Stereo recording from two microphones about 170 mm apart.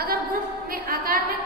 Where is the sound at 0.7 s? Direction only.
60° right (ahead or behind).